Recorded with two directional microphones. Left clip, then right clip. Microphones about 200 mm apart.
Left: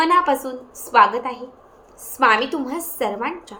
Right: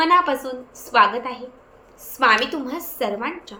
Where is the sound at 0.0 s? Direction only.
10° left (ahead or behind).